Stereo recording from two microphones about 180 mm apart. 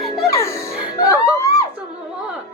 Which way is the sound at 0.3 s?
15° left (ahead or behind).